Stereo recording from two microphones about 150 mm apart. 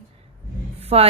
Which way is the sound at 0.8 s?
40° right (ahead or behind).